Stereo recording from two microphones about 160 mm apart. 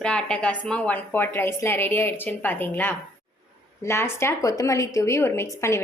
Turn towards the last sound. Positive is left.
turn(degrees=15)  # may be behind; listen again after turning